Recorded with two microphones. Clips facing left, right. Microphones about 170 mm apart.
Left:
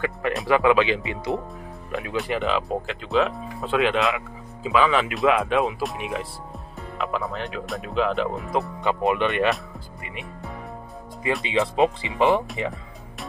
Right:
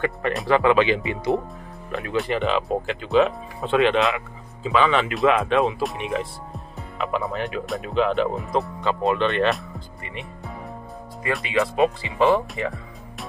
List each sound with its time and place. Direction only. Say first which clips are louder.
0.0 s speech: right 1 dB; centre (ahead or behind)
8.8 s speech: even; 20° left (ahead or behind)
10.0 s speech: even; centre (ahead or behind)
11.4 s speech: right 1 dB; 25° left (ahead or behind)